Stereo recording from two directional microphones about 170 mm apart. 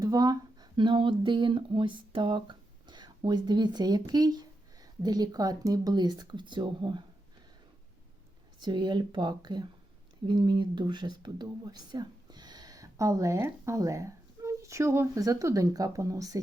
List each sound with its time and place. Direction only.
0.0 s speech: 20° right (ahead or behind)
8.6 s speech: 25° right (ahead or behind)